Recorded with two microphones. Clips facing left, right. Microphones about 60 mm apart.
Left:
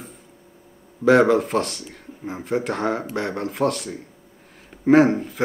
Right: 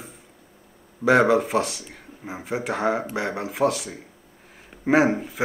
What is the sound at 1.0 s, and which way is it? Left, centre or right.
Speech, centre.